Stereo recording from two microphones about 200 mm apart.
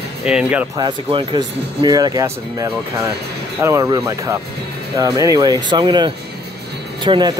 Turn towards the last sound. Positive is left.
turn(degrees=-25)  # may be behind; listen again after turning